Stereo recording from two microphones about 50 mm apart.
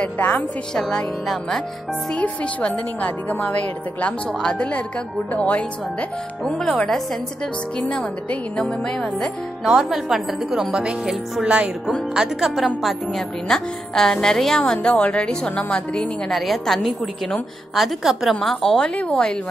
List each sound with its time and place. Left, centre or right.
0.0 s speech: left
0.7 s a woman's voice: centre
2.1 s speech: left
4.3 s a woman's voice: centre
6.4 s a woman's voice: centre
8.5 s a woman's voice: centre
9.8 s a woman's voice: centre
12.1 s a woman's voice: centre
13.5 s a woman's voice: centre
14.7 s speech: centre
16.3 s a woman's voice: centre
18.9 s speech: left